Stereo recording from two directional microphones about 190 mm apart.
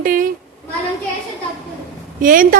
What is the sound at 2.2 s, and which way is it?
Speech, 45° right (ahead or behind).